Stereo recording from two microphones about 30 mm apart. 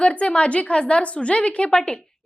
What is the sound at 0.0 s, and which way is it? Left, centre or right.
A woman's voice, left.